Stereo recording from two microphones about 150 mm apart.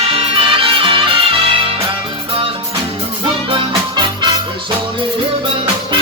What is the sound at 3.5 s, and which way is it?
Music, 35° right (ahead or behind).